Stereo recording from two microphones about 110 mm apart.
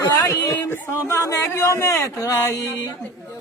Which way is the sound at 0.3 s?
20° left (ahead or behind).